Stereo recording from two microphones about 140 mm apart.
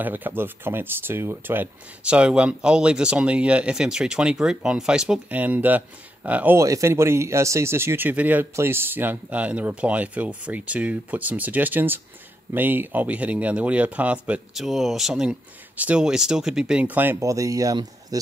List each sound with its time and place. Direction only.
0.0 s speech: 15° right (ahead or behind)